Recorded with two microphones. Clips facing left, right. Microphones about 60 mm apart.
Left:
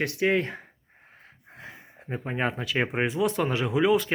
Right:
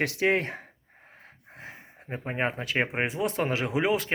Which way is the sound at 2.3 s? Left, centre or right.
Right.